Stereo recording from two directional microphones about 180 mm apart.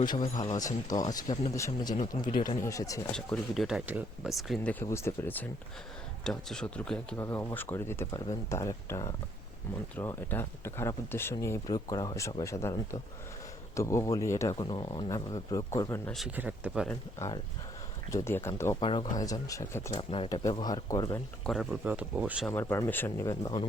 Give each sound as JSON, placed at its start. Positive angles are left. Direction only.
{"t": 0.5, "sound": "speech", "side_deg": 20}
{"t": 3.1, "sound": "speech", "side_deg": 5}
{"t": 16.1, "sound": "speech", "side_deg": -5}
{"t": 17.2, "sound": "speech", "side_deg": 20}
{"t": 18.8, "sound": "speech", "side_deg": 30}
{"t": 19.1, "sound": "speech", "side_deg": 20}
{"t": 20.0, "sound": "speech", "side_deg": 30}
{"t": 21.4, "sound": "speech", "side_deg": 0}
{"t": 22.7, "sound": "speech", "side_deg": 10}